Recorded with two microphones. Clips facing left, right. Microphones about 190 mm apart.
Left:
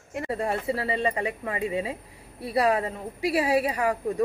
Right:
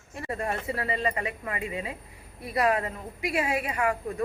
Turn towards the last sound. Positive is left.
turn(degrees=35)  # may be behind; listen again after turning